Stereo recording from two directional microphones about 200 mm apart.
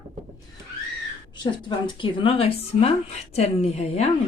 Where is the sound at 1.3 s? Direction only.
25° left (ahead or behind).